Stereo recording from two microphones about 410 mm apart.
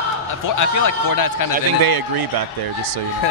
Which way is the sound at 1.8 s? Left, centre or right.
Right.